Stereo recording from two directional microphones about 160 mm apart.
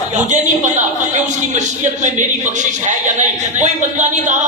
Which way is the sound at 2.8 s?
50° right (ahead or behind).